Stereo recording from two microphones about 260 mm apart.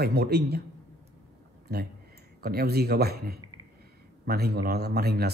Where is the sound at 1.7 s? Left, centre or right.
Right.